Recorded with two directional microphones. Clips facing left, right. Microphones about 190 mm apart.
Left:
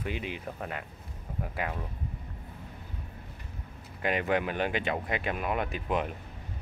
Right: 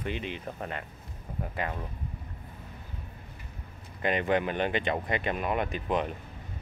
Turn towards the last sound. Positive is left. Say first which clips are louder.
# right 1 dB
turn(degrees=5)  # may be behind; listen again after turning